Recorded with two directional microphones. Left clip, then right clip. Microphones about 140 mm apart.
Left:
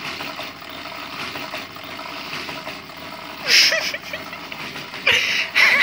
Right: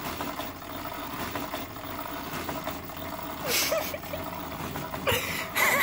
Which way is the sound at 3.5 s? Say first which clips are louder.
Left 12 dB; 35° right (ahead or behind).